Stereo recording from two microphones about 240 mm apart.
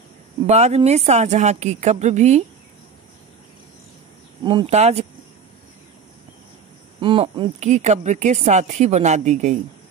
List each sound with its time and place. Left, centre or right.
0.5 s speech: right
4.5 s speech: right
7.0 s speech: right